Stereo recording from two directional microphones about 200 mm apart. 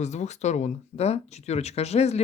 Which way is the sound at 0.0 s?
35° left (ahead or behind).